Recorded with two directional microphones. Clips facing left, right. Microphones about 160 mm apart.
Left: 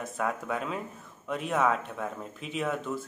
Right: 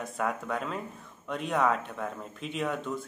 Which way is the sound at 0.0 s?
Centre (ahead or behind).